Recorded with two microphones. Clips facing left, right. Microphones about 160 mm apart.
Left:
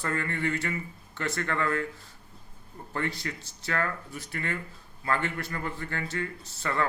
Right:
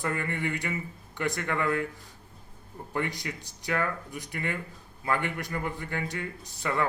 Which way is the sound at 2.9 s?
15° right (ahead or behind).